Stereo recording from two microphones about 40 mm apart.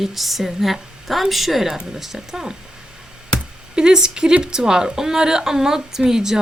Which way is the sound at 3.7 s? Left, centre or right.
Centre.